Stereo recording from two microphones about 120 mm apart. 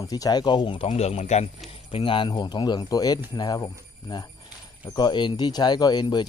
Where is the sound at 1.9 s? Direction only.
45° left (ahead or behind).